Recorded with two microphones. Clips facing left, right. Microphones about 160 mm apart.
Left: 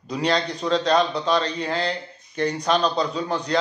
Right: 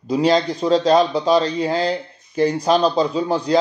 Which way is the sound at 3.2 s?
30° right (ahead or behind).